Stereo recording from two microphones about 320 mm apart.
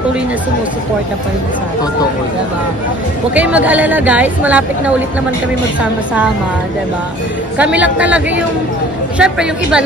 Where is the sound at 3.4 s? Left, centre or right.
Centre.